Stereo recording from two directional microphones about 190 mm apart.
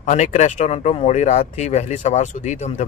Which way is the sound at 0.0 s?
40° left (ahead or behind).